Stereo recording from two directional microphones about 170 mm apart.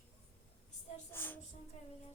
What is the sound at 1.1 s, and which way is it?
Speech, 10° left (ahead or behind).